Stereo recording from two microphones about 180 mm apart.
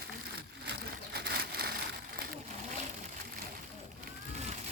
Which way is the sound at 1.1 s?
65° right (ahead or behind).